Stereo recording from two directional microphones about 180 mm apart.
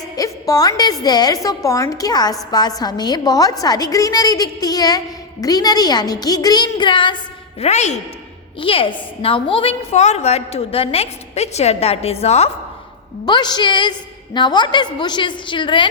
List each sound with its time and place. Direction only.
0.2 s a woman's voice: 20° left (ahead or behind)
7.6 s a woman's voice: 40° left (ahead or behind)
13.2 s a woman's voice: 25° left (ahead or behind)